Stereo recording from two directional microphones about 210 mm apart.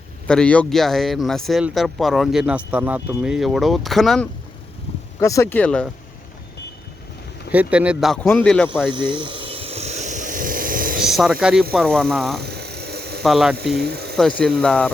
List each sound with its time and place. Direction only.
0.3 s speech: 5° left (ahead or behind)
4.9 s vehicle: 30° left (ahead or behind)
5.2 s speech: 15° left (ahead or behind)
7.5 s speech: 5° right (ahead or behind)
8.9 s a sound: 20° right (ahead or behind); by 11.0 s 40° right (ahead or behind)
11.0 s speech: centre (ahead or behind)
12.4 s a sound: 50° right (ahead or behind)
13.2 s speech: centre (ahead or behind)
13.7 s speech: 50° right (ahead or behind)
14.2 s speech: 5° left (ahead or behind)